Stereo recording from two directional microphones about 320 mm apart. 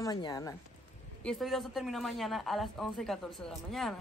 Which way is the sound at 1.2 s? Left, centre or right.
Centre.